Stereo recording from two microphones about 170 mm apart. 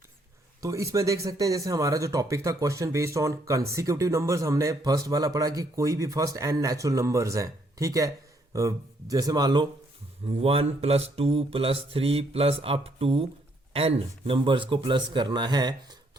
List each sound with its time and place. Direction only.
0.6 s speech: 20° right (ahead or behind)
10.4 s speech: 35° right (ahead or behind)